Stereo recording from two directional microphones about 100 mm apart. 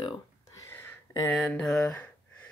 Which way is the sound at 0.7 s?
20° left (ahead or behind).